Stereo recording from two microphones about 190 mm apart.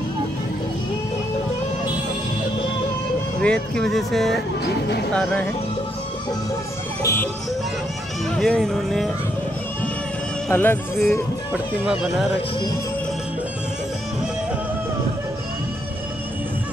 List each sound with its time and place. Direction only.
3.3 s speech: 5° left (ahead or behind)
4.6 s speech: 60° left (ahead or behind)
5.1 s speech: 5° left (ahead or behind)
7.0 s music: 15° left (ahead or behind)
8.4 s speech: centre (ahead or behind)
10.5 s speech: 10° left (ahead or behind)
11.0 s speech: 5° right (ahead or behind)
12.4 s music: 25° left (ahead or behind)